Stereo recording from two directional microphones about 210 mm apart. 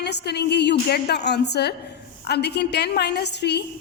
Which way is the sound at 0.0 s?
50° left (ahead or behind).